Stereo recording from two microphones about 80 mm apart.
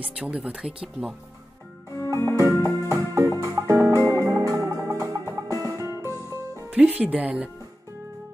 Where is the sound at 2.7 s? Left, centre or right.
Right.